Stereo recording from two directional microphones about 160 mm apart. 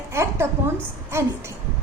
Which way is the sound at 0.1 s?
15° right (ahead or behind).